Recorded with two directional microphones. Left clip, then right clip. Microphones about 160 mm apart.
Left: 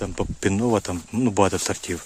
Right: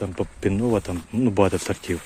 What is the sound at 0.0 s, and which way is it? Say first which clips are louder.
Speech: even; 35° left (ahead or behind).